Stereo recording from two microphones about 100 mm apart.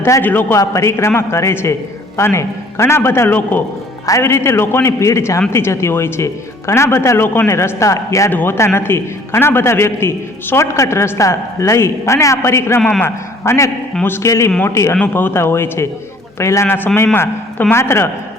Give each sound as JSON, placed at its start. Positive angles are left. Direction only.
{"t": 0.0, "sound": "a man's voice", "side_deg": 20}
{"t": 0.6, "sound": "a man's voice", "side_deg": 30}
{"t": 4.0, "sound": "a man's voice", "side_deg": 30}
{"t": 8.3, "sound": "a man's voice", "side_deg": 20}
{"t": 14.9, "sound": "a man's voice", "side_deg": 20}